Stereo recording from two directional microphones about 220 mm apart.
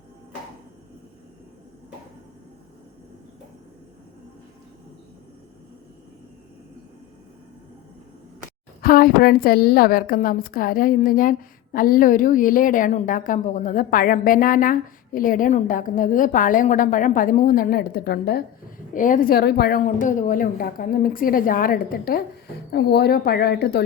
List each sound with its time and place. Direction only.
8.8 s a woman's voice: 40° left (ahead or behind)